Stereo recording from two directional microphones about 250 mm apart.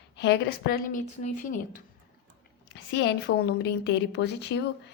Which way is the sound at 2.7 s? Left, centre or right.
Left.